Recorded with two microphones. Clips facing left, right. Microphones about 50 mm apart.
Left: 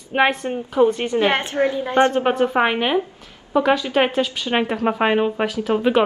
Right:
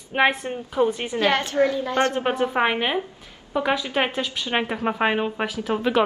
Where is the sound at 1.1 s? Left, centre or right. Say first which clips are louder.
Left 2 dB; left.